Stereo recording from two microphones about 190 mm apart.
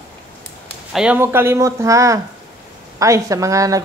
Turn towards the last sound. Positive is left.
turn(degrees=-15)  # may be behind; listen again after turning